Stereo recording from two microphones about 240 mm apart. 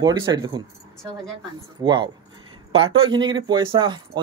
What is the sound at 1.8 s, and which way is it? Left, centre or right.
Speech, centre.